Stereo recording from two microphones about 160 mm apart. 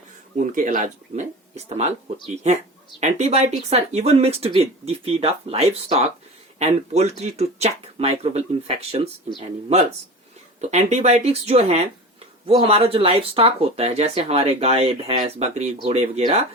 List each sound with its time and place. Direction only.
0.3 s speech: 55° right (ahead or behind); by 9.0 s 40° right (ahead or behind)
10.6 s speech: 45° right (ahead or behind)